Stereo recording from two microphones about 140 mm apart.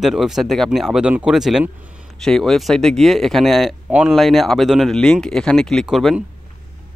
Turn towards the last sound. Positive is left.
turn(degrees=0)  # may be behind; listen again after turning